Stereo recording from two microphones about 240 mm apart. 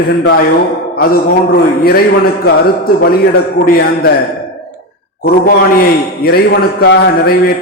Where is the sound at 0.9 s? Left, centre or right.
Left.